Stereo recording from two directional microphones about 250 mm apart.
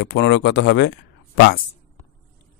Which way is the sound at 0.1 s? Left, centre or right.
Left.